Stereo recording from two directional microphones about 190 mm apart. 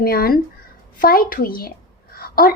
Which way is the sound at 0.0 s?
55° left (ahead or behind).